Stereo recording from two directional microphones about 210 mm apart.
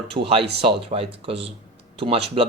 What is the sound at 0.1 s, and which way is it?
A man's voice, 25° right (ahead or behind).